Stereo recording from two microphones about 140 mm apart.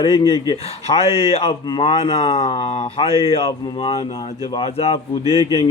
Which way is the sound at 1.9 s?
45° left (ahead or behind).